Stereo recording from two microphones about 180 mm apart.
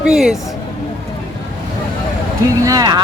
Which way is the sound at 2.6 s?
20° right (ahead or behind).